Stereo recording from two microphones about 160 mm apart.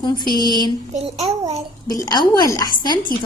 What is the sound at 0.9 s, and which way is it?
Speech, 45° right (ahead or behind).